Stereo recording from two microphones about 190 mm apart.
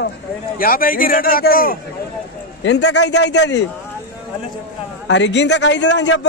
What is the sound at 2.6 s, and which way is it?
A man's voice, 65° left (ahead or behind).